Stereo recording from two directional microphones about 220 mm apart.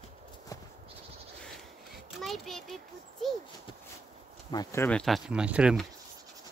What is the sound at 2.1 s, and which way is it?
A child's voice, centre (ahead or behind).